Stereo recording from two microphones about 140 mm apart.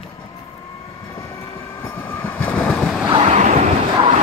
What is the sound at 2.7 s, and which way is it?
Waves, centre (ahead or behind).